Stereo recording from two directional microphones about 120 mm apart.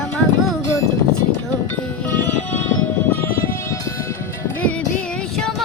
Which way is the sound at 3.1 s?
25° left (ahead or behind).